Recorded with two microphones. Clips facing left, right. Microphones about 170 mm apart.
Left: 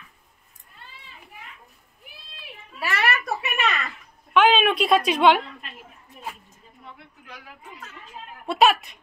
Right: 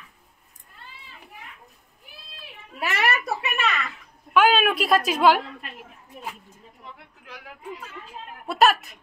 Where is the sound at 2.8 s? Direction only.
20° right (ahead or behind).